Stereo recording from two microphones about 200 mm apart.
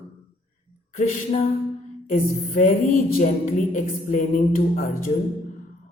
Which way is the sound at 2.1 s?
40° left (ahead or behind).